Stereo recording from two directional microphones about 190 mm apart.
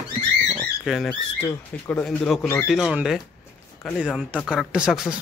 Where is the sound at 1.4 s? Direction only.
10° left (ahead or behind).